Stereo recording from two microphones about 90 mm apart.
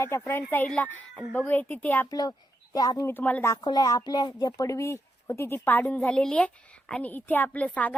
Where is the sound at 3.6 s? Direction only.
50° left (ahead or behind); by 5.5 s 30° left (ahead or behind).